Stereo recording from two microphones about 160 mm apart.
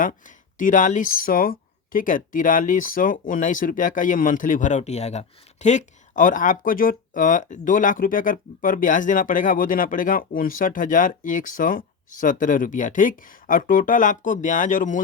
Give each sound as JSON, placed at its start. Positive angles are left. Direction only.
{"t": 0.6, "sound": "speech", "side_deg": 55}